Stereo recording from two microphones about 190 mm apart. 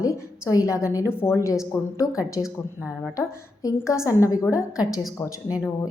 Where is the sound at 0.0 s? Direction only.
20° left (ahead or behind).